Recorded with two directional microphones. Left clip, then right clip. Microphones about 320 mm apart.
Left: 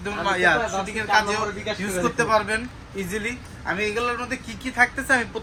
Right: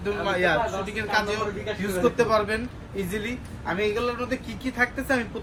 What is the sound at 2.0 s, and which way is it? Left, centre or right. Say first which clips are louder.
Speech: even; centre.